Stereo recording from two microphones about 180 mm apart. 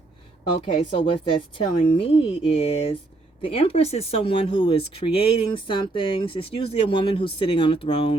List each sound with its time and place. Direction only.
0.8 s speech: 30° left (ahead or behind)